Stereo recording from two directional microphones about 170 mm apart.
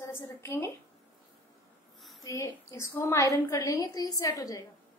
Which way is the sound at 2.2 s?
20° left (ahead or behind).